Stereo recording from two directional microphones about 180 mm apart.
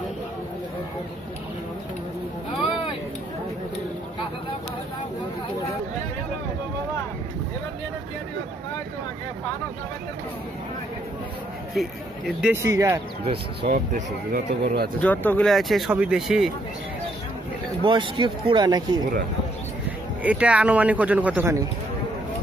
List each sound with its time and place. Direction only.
11.7 s speech: centre (ahead or behind)
12.6 s speech: 15° right (ahead or behind)
13.6 s speech: 50° right (ahead or behind)
14.6 s speech: 60° right (ahead or behind)
15.0 s speech: 10° left (ahead or behind)
17.8 s speech: 25° right (ahead or behind)
20.2 s speech: 5° right (ahead or behind)